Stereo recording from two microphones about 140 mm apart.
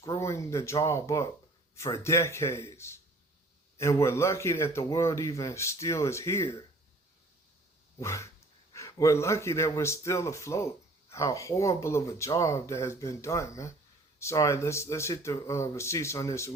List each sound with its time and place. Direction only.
0.0 s speech: 25° left (ahead or behind)
7.9 s speech: 20° left (ahead or behind)